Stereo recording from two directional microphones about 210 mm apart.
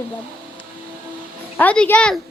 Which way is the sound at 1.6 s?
5° left (ahead or behind).